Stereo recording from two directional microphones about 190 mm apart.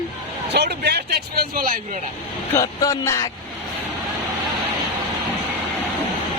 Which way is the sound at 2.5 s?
20° left (ahead or behind).